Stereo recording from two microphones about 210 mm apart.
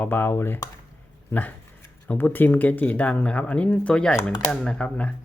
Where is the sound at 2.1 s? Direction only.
10° left (ahead or behind).